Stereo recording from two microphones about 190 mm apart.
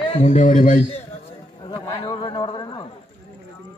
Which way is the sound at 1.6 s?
20° left (ahead or behind).